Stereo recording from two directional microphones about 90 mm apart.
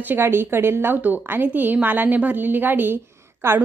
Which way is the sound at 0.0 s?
25° right (ahead or behind).